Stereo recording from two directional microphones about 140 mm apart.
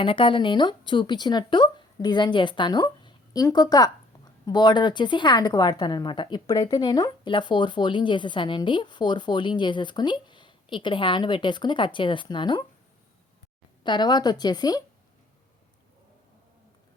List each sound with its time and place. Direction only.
0.0 s a woman's voice: 40° left (ahead or behind)
13.8 s a woman's voice: 30° left (ahead or behind)